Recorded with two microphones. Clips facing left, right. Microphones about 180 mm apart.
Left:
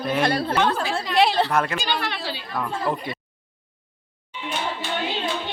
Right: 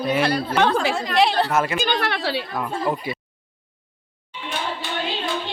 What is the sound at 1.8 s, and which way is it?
Speech, 55° right (ahead or behind).